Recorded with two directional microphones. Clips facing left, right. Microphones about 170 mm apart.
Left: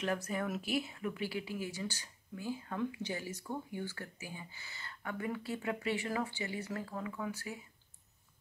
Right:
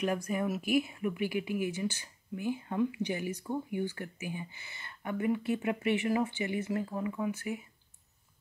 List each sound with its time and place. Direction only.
0.0 s a woman's voice: 15° right (ahead or behind)